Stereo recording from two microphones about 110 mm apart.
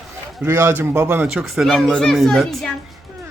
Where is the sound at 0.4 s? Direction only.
20° right (ahead or behind).